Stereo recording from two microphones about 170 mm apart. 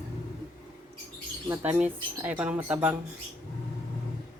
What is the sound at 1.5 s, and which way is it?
Speech, 10° right (ahead or behind).